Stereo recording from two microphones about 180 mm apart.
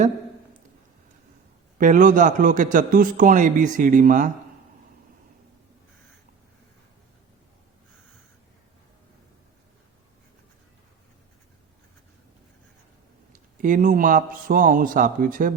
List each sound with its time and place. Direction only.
1.8 s a man's voice: 45° right (ahead or behind)
13.3 s a man's voice: 45° right (ahead or behind)